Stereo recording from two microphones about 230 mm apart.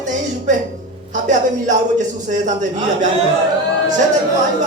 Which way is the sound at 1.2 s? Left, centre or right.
Right.